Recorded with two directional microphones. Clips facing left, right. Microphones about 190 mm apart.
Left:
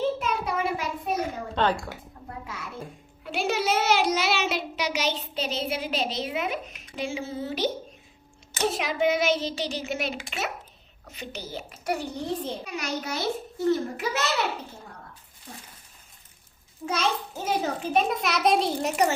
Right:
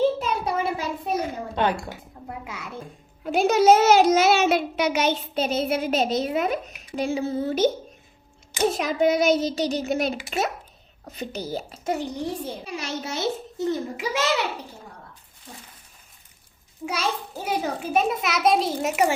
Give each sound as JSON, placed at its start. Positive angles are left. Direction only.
{"t": 0.2, "sound": "a sound", "side_deg": -35}
{"t": 1.6, "sound": "a child's voice", "side_deg": -10}
{"t": 3.2, "sound": "a child's voice", "side_deg": -45}
{"t": 8.6, "sound": "child singing", "side_deg": -45}
{"t": 11.9, "sound": "a child's voice", "side_deg": -15}
{"t": 12.6, "sound": "a child's voice", "side_deg": -30}
{"t": 16.8, "sound": "a child's voice", "side_deg": -10}